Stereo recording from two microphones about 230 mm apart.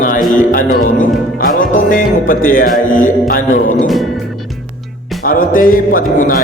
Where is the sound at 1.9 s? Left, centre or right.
Left.